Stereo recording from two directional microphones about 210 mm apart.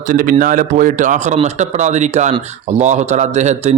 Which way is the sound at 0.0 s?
40° right (ahead or behind).